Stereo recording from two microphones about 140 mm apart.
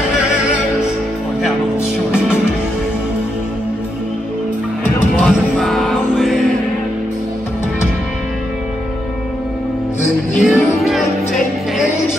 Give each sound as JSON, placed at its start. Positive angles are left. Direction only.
{"t": 5.2, "sound": "music", "side_deg": 0}
{"t": 10.4, "sound": "music", "side_deg": 0}